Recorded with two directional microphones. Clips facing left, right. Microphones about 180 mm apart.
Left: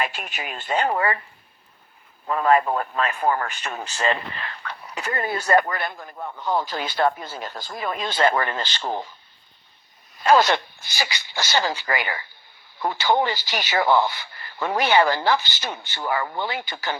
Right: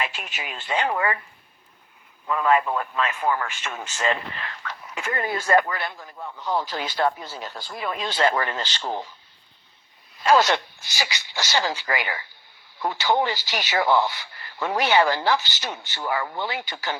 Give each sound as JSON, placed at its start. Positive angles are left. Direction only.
{"t": 0.0, "sound": "speech", "side_deg": 50}
{"t": 2.2, "sound": "speech", "side_deg": 40}
{"t": 5.6, "sound": "speech", "side_deg": 50}
{"t": 10.3, "sound": "speech", "side_deg": 55}